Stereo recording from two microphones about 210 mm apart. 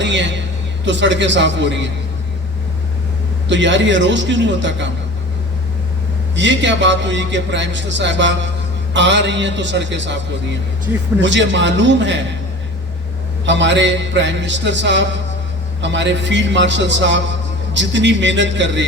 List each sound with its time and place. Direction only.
0.0 s a sound: 60° right (ahead or behind)
0.9 s a man's voice: 60° right (ahead or behind)
3.5 s a man's voice: 60° right (ahead or behind)
6.3 s a man's voice: 60° right (ahead or behind)
11.2 s a man's voice: 60° right (ahead or behind)
13.4 s a man's voice: 60° right (ahead or behind)